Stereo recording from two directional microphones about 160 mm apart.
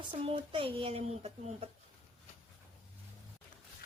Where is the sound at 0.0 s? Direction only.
35° right (ahead or behind).